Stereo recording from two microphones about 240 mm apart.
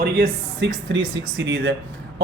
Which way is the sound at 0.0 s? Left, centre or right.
Right.